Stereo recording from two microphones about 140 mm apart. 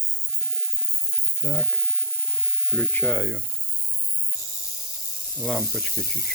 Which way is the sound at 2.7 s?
15° left (ahead or behind).